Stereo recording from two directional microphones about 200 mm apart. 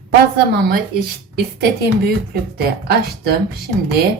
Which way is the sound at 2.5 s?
55° right (ahead or behind).